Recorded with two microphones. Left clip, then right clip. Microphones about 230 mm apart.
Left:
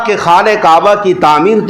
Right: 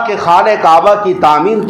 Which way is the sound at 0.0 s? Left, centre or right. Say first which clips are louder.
Left 1 dB; left.